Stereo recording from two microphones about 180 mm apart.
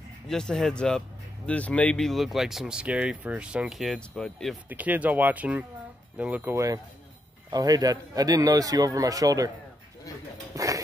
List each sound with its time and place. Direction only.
0.3 s speech: 5° left (ahead or behind)
4.6 s a man's voice: 10° right (ahead or behind)
10.5 s a sound: 20° right (ahead or behind)